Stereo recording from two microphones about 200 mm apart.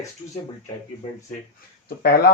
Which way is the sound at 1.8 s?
50° left (ahead or behind).